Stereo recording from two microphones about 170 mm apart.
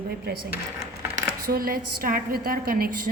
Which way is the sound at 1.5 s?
60° right (ahead or behind).